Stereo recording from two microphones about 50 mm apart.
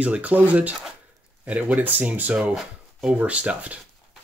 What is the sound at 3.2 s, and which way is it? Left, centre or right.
Speech, right.